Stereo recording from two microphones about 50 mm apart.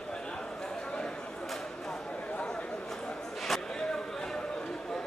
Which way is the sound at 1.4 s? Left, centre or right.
Centre.